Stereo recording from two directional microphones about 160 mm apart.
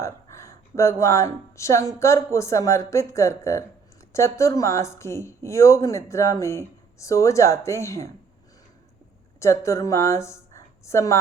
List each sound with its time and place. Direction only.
0.0 s speech: 20° left (ahead or behind)
9.4 s speech: 15° left (ahead or behind)